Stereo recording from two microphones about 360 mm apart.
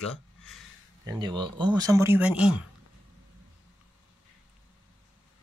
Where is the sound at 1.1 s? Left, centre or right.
Centre.